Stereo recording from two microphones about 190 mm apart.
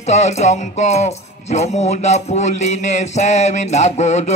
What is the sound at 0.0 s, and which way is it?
Music, 35° left (ahead or behind).